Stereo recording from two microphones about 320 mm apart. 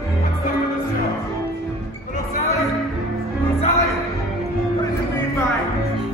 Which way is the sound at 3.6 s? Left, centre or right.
Centre.